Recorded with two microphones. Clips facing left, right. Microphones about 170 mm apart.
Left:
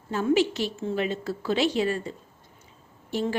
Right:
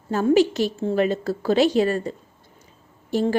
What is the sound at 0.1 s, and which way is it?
A woman's voice, 40° right (ahead or behind).